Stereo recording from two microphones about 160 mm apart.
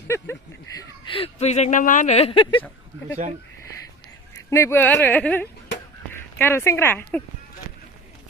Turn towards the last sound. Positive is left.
turn(degrees=10)  # may be behind; listen again after turning